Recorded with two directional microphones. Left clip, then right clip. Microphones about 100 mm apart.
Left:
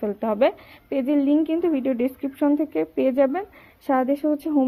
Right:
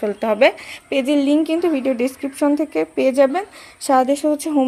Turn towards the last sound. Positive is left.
turn(degrees=-25)  # may be behind; listen again after turning